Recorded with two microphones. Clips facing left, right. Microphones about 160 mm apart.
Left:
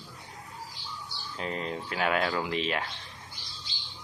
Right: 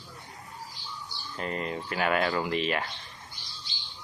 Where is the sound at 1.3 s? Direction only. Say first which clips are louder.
Right 1 dB; centre (ahead or behind).